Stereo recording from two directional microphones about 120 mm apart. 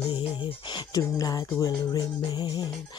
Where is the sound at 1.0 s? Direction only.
30° left (ahead or behind).